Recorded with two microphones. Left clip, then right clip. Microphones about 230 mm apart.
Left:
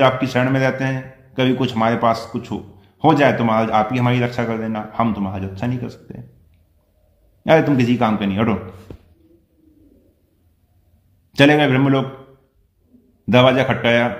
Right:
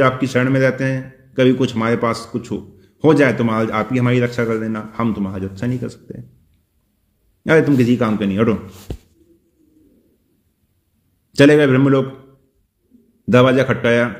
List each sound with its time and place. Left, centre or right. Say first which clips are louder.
0.0 s a man's voice: even; centre
7.4 s a man's voice: right 1 dB; centre
8.9 s a sound: right 6 dB; right
11.3 s a man's voice: right 2 dB; centre
13.2 s a man's voice: right 1 dB; centre